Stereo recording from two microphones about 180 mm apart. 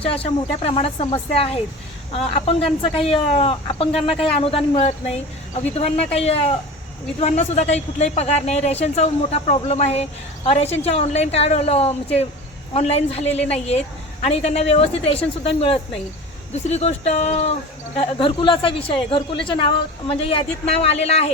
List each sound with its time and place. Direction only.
0.0 s speech: 30° left (ahead or behind)